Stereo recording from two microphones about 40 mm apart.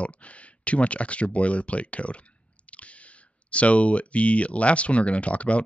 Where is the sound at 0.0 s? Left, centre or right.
Left.